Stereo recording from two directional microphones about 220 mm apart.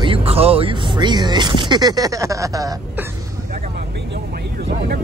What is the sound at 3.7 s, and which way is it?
Vehicle, 50° right (ahead or behind).